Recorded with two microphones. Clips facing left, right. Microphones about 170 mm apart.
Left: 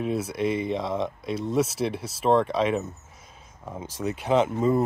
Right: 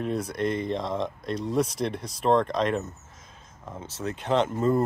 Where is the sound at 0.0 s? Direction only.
5° left (ahead or behind).